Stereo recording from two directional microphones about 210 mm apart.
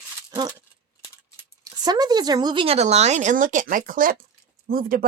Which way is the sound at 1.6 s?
20° right (ahead or behind).